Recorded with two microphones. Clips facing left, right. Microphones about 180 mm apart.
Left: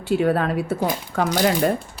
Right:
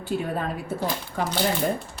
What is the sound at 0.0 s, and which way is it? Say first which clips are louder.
Speech: left 8 dB; 75° left (ahead or behind).